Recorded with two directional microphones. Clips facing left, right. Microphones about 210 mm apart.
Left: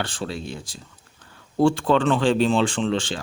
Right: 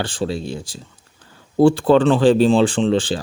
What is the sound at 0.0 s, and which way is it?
Speech, 30° right (ahead or behind).